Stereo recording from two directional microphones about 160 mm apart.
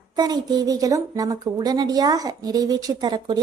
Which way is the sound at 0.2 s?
25° right (ahead or behind).